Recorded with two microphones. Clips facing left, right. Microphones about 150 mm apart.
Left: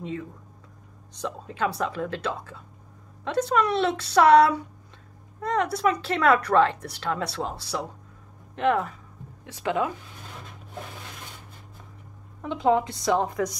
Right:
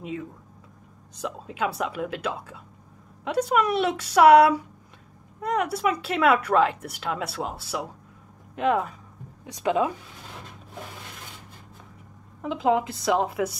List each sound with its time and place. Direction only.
1.2 s speech: 10° right (ahead or behind)
12.4 s a woman's voice: 5° right (ahead or behind)